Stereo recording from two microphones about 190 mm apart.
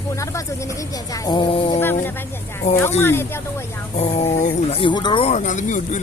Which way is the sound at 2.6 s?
35° left (ahead or behind).